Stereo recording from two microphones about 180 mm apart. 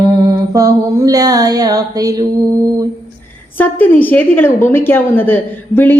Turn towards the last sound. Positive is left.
turn(degrees=10)  # may be behind; listen again after turning